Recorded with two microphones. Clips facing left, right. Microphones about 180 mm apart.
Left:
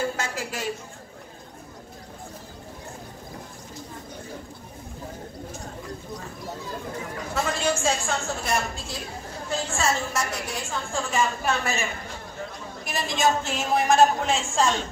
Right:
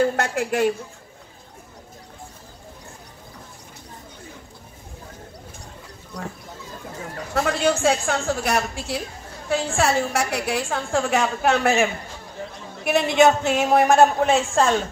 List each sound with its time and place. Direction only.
0.0 s a woman's voice: 65° right (ahead or behind)
7.3 s a woman's voice: 65° right (ahead or behind)